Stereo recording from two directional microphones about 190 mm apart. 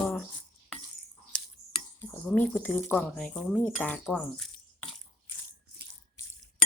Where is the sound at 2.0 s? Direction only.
10° left (ahead or behind).